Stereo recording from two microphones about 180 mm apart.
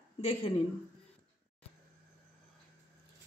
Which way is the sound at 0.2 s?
30° left (ahead or behind).